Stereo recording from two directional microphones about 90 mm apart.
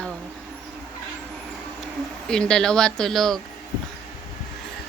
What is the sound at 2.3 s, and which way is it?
Speech, 10° left (ahead or behind).